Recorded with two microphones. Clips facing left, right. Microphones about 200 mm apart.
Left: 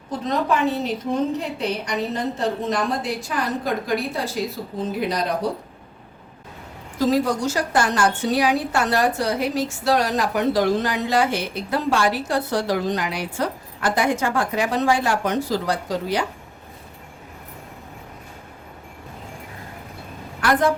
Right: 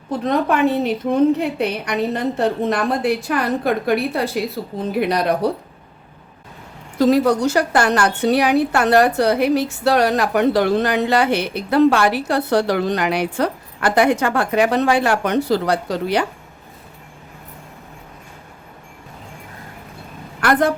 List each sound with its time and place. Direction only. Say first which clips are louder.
0.3 s a woman's voice: right 4 dB; 60° right (ahead or behind)
7.0 s a woman's voice: right 5 dB; 65° right (ahead or behind)
20.4 s a woman's voice: right 2 dB; 60° right (ahead or behind)